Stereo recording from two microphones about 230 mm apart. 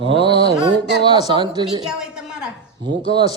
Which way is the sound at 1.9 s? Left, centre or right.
Centre.